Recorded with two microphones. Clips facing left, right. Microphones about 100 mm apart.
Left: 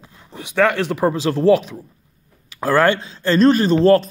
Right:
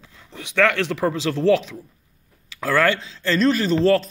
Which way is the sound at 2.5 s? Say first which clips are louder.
Left 4 dB; 35° left (ahead or behind).